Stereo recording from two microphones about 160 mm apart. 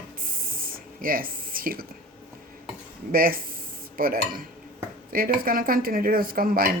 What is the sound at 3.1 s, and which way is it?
A woman's voice, 65° right (ahead or behind).